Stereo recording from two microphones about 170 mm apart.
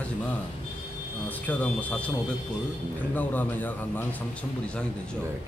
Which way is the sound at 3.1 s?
10° left (ahead or behind).